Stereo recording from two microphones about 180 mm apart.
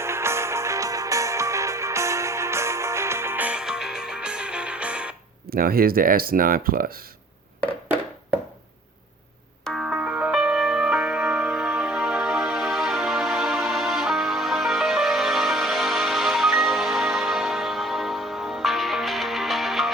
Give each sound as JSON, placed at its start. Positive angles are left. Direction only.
{"t": 0.0, "sound": "music", "side_deg": -15}
{"t": 5.5, "sound": "speech", "side_deg": -55}
{"t": 9.6, "sound": "music", "side_deg": 0}